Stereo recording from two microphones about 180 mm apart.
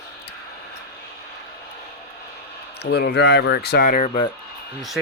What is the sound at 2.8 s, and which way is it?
Speech, 60° left (ahead or behind).